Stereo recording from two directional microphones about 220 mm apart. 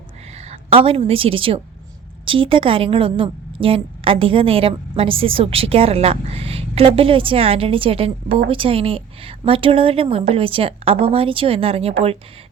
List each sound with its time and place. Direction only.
0.5 s a woman's voice: 25° right (ahead or behind)